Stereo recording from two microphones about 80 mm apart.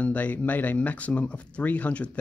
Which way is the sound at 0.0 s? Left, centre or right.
Centre.